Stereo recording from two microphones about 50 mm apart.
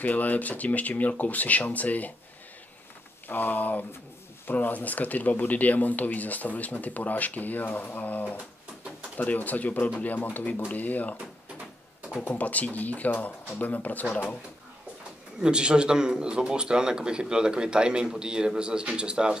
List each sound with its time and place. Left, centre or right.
0.0 s speech: left
3.3 s speech: left
12.3 s speech: left
15.4 s speech: centre